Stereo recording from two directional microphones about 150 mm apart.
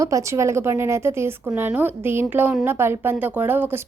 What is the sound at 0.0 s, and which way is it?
A woman's voice, 20° right (ahead or behind).